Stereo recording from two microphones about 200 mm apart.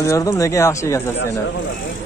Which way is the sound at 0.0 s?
15° left (ahead or behind).